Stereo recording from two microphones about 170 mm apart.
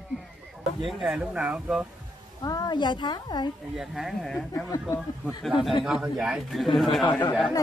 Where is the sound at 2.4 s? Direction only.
25° left (ahead or behind).